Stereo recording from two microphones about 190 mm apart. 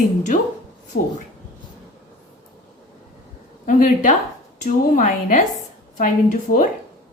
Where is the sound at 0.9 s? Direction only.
60° left (ahead or behind).